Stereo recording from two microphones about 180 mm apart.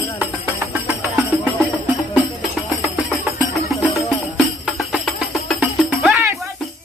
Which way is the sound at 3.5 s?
Centre (ahead or behind).